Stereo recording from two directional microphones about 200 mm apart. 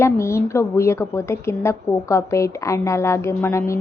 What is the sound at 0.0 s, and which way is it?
A woman's voice, 15° left (ahead or behind).